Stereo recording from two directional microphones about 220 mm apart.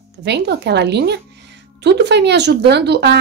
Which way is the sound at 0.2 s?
50° right (ahead or behind).